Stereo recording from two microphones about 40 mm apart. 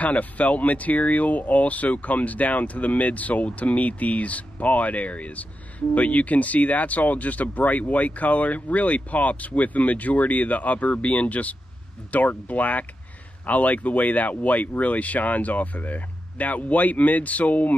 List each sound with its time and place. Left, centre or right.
0.0 s speech: left